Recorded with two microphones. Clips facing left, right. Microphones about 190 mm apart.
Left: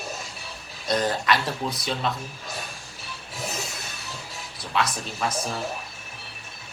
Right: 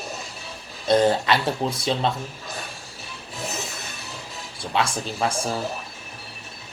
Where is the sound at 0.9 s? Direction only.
30° right (ahead or behind).